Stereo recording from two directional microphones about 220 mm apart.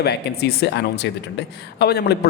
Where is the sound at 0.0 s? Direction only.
45° left (ahead or behind).